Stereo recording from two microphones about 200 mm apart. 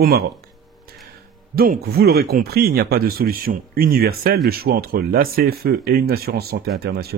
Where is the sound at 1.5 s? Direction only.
50° right (ahead or behind).